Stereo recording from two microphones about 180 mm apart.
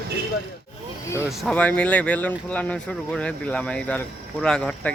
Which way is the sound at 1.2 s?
Centre (ahead or behind).